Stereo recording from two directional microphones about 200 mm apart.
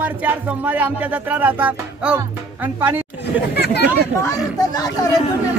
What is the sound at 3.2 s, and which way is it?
Speech, 55° left (ahead or behind).